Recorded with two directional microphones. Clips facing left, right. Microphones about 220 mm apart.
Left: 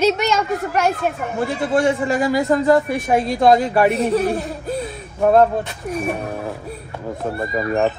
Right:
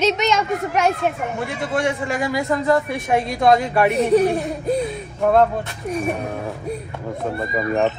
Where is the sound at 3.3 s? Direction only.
30° left (ahead or behind).